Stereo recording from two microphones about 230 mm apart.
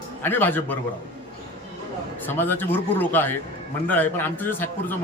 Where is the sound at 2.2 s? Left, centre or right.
Centre.